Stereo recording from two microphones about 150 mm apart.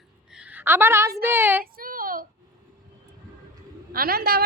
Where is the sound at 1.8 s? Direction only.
70° right (ahead or behind).